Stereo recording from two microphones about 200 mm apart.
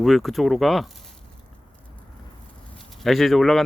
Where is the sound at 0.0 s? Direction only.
Centre (ahead or behind).